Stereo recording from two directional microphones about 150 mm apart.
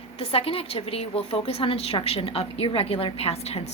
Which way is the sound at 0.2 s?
40° left (ahead or behind).